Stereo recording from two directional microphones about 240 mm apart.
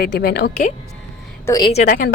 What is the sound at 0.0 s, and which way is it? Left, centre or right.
Speech, left.